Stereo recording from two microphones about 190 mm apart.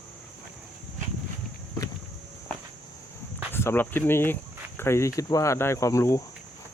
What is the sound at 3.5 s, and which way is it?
Speech, 10° left (ahead or behind).